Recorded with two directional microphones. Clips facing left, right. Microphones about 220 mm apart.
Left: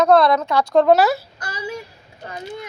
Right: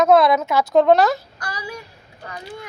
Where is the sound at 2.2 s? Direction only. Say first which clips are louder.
Left 3 dB; 25° left (ahead or behind).